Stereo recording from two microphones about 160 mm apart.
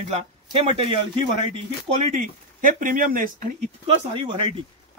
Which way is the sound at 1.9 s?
50° right (ahead or behind).